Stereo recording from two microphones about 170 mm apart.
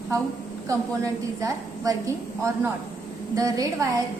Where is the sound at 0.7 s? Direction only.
20° right (ahead or behind).